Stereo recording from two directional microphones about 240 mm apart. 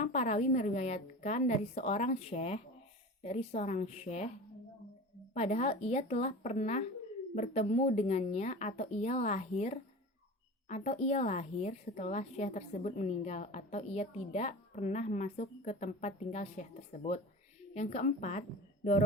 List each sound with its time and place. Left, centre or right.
0.0 s a woman's voice: left
5.3 s a woman's voice: left